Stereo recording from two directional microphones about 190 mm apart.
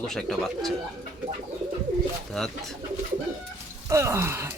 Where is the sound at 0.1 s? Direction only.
Centre (ahead or behind).